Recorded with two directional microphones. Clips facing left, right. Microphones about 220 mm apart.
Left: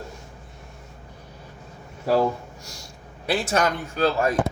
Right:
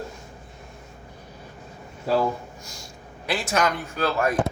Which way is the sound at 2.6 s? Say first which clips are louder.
Right 1 dB; 70° left (ahead or behind).